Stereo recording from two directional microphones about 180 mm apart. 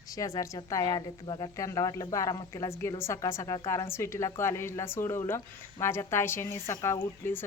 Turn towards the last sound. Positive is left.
turn(degrees=10)  # may be behind; listen again after turning